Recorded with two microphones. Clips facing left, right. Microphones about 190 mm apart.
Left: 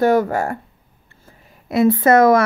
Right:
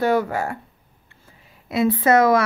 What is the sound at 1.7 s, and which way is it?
Speech, 50° left (ahead or behind).